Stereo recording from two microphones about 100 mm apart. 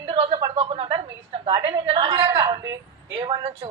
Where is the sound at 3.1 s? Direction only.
50° right (ahead or behind).